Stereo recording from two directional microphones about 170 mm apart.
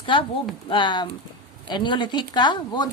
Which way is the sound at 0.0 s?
30° left (ahead or behind).